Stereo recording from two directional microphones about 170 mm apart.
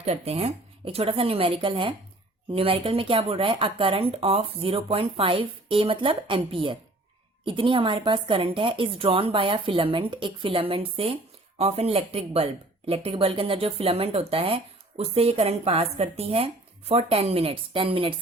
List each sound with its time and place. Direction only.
0.0 s speech: 35° right (ahead or behind)